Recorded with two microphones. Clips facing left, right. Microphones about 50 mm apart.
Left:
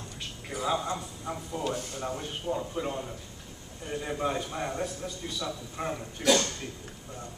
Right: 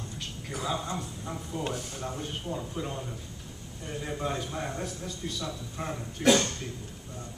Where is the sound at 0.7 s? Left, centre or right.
Centre.